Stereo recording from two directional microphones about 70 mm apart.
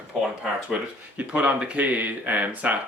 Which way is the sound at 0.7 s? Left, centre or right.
Centre.